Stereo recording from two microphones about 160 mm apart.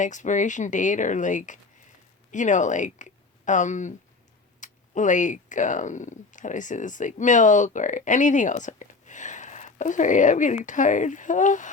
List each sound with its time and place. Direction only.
0.0 s speech: 50° left (ahead or behind)